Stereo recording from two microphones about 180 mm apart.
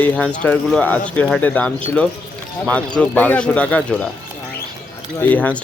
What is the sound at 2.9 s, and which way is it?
Speech, 10° left (ahead or behind).